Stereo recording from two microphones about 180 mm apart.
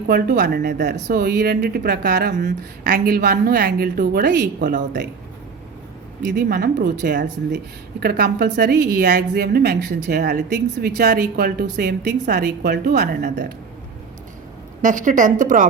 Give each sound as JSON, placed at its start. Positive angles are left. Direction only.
{"t": 0.1, "sound": "a woman's voice", "side_deg": -65}
{"t": 2.9, "sound": "a woman's voice", "side_deg": -50}
{"t": 4.6, "sound": "speech", "side_deg": -45}
{"t": 6.2, "sound": "speech", "side_deg": -50}
{"t": 7.5, "sound": "a woman's voice", "side_deg": -65}
{"t": 14.8, "sound": "speech", "side_deg": -45}